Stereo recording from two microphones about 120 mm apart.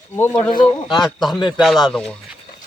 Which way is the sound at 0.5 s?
40° left (ahead or behind).